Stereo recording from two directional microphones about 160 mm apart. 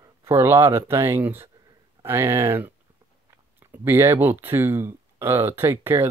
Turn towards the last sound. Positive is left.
turn(degrees=-15)  # may be behind; listen again after turning